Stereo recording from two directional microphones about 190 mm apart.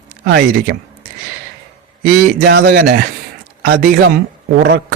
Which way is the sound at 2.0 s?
55° right (ahead or behind).